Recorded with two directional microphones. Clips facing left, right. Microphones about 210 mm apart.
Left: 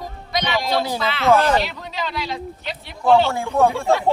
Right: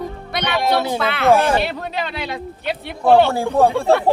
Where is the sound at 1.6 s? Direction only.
60° right (ahead or behind).